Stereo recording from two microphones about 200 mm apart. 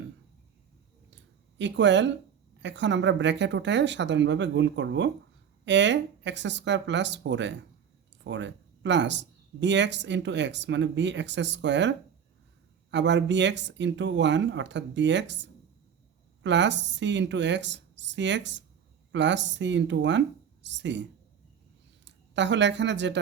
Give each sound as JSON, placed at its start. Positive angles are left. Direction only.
{"t": 1.5, "sound": "speech", "side_deg": -60}
{"t": 22.0, "sound": "a woman's voice", "side_deg": -60}